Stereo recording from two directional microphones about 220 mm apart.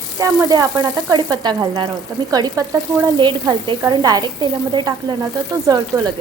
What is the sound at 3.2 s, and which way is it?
Sizzle, 20° right (ahead or behind).